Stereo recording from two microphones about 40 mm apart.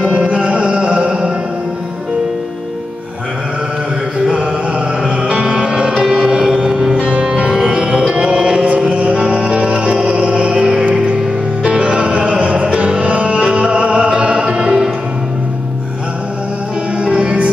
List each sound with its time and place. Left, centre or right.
0.2 s music: right
4.3 s mantra: right
5.2 s music: right
7.0 s music: right
8.8 s music: right
10.6 s music: centre
10.9 s music: right
13.5 s music: right
17.0 s music: right